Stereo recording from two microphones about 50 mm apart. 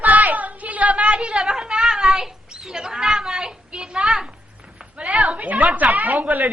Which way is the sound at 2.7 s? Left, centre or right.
Centre.